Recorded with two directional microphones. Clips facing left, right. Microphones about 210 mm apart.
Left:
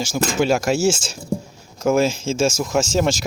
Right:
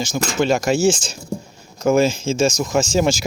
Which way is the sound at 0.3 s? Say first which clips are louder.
Right 1 dB; 5° left (ahead or behind).